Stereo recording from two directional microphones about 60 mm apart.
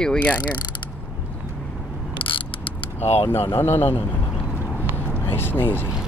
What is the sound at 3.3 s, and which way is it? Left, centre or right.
Speech, left.